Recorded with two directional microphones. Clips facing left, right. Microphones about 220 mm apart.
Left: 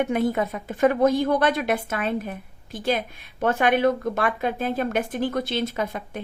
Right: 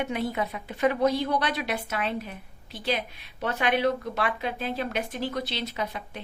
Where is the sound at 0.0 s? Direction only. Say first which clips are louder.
Left 6 dB; 50° left (ahead or behind).